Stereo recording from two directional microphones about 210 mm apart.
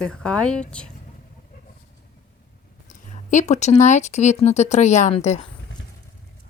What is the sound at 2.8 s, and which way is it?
Speech, 35° left (ahead or behind).